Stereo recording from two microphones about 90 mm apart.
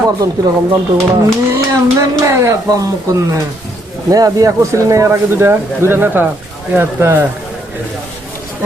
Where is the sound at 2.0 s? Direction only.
35° right (ahead or behind).